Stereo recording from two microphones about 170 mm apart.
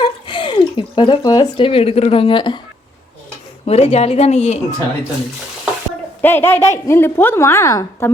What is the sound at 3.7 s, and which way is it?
Speech, 40° left (ahead or behind).